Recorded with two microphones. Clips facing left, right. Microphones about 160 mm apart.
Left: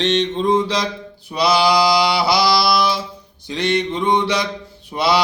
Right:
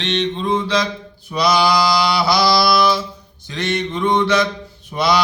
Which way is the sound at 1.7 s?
15° left (ahead or behind).